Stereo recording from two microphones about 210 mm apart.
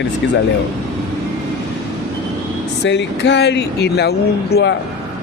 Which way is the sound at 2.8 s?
55° left (ahead or behind).